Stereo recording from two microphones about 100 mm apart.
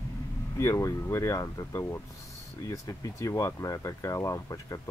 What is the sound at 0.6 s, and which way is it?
Speech, 30° left (ahead or behind).